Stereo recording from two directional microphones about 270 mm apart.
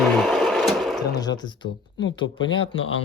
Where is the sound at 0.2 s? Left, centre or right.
Centre.